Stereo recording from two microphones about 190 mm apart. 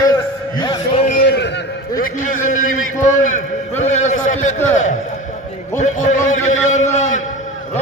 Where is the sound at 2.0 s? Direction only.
40° left (ahead or behind).